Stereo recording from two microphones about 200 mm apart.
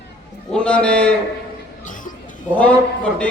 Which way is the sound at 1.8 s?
40° left (ahead or behind).